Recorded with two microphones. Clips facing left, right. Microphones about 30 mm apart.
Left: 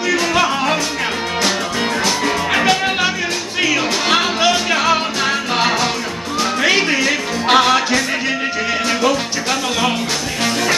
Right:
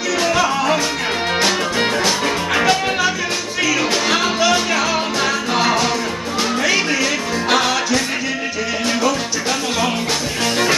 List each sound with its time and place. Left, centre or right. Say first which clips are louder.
2.5 s music: even; centre
4.1 s music: left 3 dB; left
6.6 s music: left 3 dB; left